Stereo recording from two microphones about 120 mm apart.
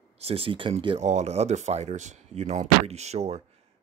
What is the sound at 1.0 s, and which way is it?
Speech, 70° right (ahead or behind).